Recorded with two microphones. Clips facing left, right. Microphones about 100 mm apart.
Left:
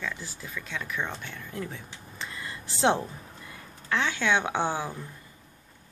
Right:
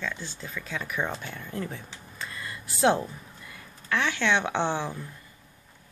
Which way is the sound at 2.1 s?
20° left (ahead or behind).